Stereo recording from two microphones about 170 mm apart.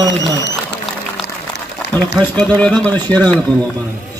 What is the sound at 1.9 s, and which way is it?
Speech, 10° left (ahead or behind).